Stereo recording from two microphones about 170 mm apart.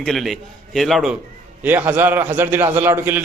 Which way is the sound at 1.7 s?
10° right (ahead or behind).